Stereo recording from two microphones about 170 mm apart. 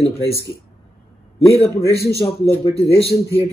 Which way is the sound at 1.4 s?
15° left (ahead or behind).